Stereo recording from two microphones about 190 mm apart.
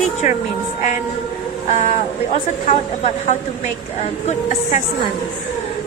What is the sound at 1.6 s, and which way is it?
A woman's voice, 40° left (ahead or behind).